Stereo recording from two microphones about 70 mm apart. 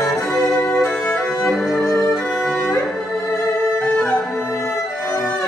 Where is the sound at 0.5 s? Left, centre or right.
Left.